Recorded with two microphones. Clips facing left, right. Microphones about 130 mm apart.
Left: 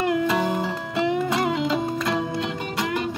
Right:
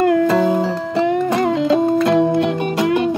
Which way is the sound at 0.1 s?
40° right (ahead or behind).